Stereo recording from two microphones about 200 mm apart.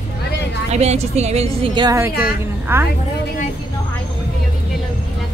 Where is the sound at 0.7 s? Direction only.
30° right (ahead or behind); by 2.9 s 10° right (ahead or behind).